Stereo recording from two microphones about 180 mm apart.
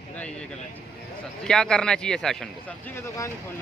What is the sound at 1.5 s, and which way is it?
Speech, 5° left (ahead or behind).